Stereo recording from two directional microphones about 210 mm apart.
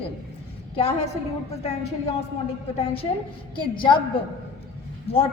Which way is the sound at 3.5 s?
25° left (ahead or behind).